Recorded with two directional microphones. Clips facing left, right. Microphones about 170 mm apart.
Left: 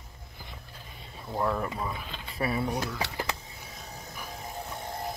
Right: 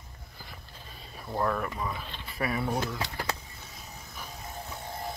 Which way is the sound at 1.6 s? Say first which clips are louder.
Left 1 dB; 25° left (ahead or behind).